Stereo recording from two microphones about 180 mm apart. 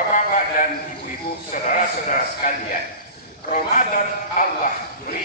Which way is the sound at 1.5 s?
45° left (ahead or behind).